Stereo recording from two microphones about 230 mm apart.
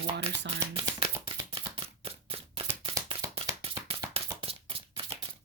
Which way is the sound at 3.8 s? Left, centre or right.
Right.